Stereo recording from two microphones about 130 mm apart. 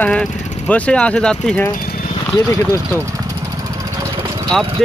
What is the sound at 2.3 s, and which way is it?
Speech, 25° left (ahead or behind).